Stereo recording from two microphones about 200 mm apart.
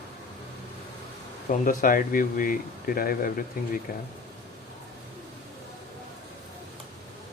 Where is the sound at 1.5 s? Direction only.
45° left (ahead or behind).